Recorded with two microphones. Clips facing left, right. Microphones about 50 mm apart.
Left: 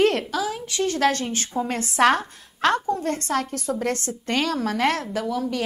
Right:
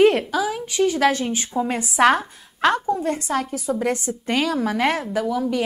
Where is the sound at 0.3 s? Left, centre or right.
Centre.